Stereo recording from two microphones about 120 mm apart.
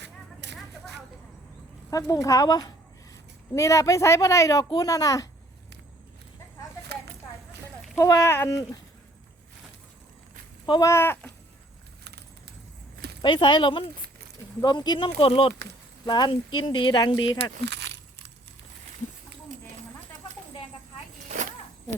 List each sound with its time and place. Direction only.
1.9 s a woman's voice: 30° left (ahead or behind)
7.9 s a woman's voice: 25° left (ahead or behind)
10.7 s a woman's voice: 30° left (ahead or behind)
13.2 s speech: 40° left (ahead or behind)
16.0 s speech: 40° left (ahead or behind)